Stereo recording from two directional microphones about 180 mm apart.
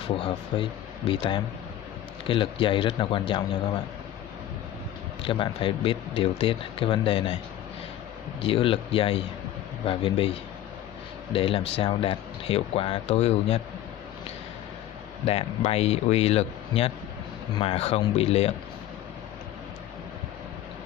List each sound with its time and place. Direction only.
0.2 s speech: 30° left (ahead or behind)
5.2 s speech: 30° left (ahead or behind)
8.4 s speech: 30° left (ahead or behind)
11.3 s speech: 30° left (ahead or behind)
15.2 s speech: 35° left (ahead or behind)